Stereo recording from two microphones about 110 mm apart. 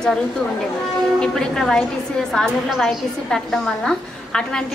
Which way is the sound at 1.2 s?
5° left (ahead or behind).